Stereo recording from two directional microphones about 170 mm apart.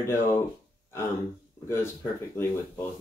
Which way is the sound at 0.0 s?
15° left (ahead or behind).